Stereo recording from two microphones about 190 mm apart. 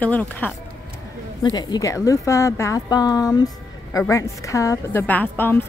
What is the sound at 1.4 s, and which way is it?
A woman's voice, 20° left (ahead or behind).